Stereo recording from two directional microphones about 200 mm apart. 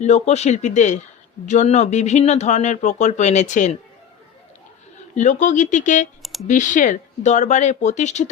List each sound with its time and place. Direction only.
0.0 s speech: 35° left (ahead or behind)
5.1 s speech: 35° left (ahead or behind)